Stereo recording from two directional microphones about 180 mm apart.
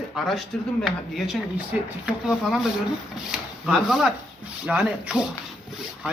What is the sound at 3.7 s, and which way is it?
Speech, centre (ahead or behind).